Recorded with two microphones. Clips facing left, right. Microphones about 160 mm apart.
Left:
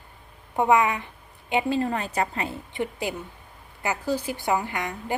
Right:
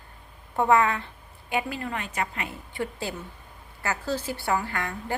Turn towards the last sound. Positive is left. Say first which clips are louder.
# left 2 dB
turn(degrees=20)  # may be behind; listen again after turning